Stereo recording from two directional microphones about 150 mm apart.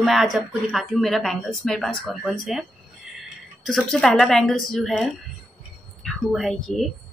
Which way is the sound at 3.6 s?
5° left (ahead or behind).